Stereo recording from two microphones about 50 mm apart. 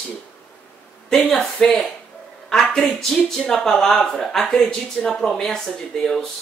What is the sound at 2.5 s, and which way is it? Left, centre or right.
Speech, centre.